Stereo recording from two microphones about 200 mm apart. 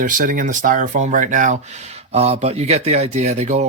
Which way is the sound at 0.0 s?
40° right (ahead or behind).